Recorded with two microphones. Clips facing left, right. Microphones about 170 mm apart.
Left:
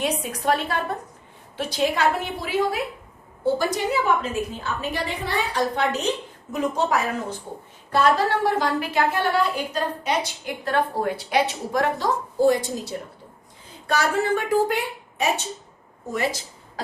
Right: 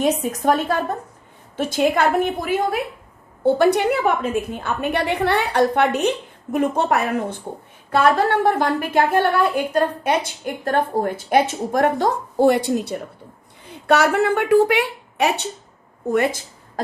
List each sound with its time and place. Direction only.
0.0 s a woman's voice: 45° right (ahead or behind)
3.4 s a woman's voice: 65° right (ahead or behind)
16.1 s a woman's voice: 55° right (ahead or behind)